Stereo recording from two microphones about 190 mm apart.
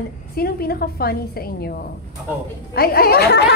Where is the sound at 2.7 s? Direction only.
55° left (ahead or behind).